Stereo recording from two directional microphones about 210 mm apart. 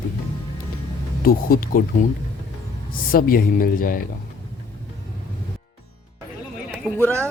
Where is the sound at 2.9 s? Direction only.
45° left (ahead or behind).